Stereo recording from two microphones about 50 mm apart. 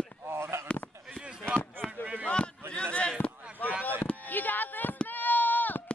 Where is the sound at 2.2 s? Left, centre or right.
Left.